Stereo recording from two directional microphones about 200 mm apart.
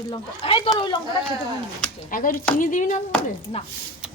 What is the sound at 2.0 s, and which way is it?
Speech, 40° left (ahead or behind).